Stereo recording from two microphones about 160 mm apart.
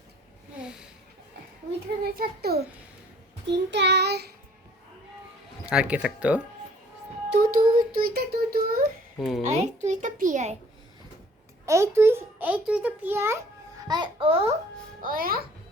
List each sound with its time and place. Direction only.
0.6 s a sound: 5° right (ahead or behind)
2.1 s a child's voice: 75° right (ahead or behind)
3.4 s child singing: 90° right
5.6 s speech: 5° right (ahead or behind)
7.3 s child singing: 65° right (ahead or behind)
9.1 s speech: centre (ahead or behind)
9.4 s a child's voice: 45° right (ahead or behind)
11.6 s a child's voice: 20° right (ahead or behind); by 14.5 s 35° right (ahead or behind)
15.0 s a child's voice: 65° right (ahead or behind)